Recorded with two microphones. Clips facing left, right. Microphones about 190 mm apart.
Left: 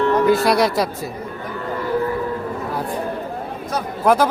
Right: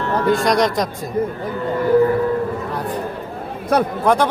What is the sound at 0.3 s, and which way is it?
Speech, 5° left (ahead or behind).